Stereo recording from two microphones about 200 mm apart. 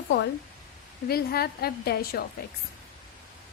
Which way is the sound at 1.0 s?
50° left (ahead or behind).